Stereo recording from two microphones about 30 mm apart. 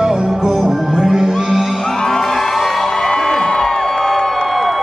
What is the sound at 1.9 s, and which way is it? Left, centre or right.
Music, centre.